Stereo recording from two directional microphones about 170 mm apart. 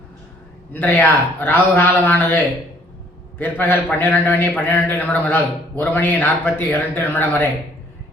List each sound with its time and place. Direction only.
0.7 s a man's voice: 10° left (ahead or behind)